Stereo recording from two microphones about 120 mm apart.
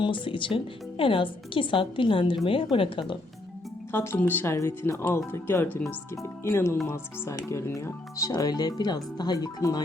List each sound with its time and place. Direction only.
0.0 s speech: 45° left (ahead or behind)
3.9 s speech: 20° left (ahead or behind)